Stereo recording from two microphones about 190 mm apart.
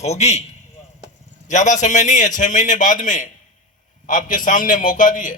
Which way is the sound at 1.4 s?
40° left (ahead or behind).